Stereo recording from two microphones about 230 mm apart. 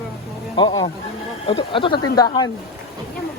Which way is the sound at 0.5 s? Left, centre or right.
Centre.